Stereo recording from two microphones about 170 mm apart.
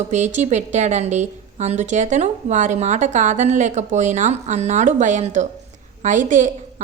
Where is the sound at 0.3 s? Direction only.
45° right (ahead or behind).